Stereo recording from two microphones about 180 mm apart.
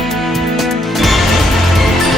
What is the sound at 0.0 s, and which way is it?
Music, centre (ahead or behind).